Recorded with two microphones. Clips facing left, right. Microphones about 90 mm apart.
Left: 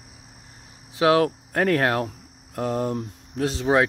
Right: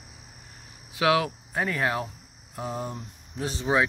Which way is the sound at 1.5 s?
60° left (ahead or behind).